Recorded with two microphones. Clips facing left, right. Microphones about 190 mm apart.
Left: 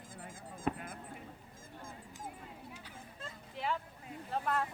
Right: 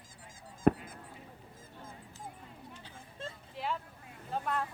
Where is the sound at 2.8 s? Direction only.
30° right (ahead or behind).